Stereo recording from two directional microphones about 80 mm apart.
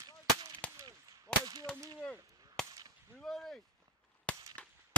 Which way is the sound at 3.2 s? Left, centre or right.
Centre.